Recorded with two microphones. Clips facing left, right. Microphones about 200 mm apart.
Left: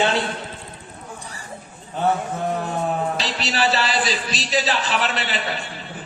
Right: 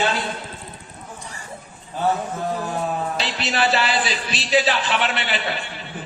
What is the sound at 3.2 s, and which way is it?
A man's voice, 40° left (ahead or behind).